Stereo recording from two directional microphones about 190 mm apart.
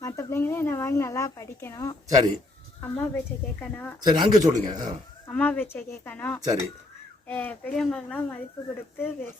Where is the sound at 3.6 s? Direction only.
10° left (ahead or behind).